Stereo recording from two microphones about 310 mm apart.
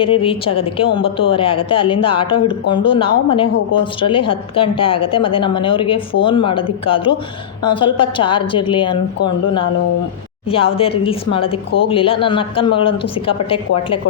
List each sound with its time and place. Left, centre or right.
0.0 s a woman's voice: centre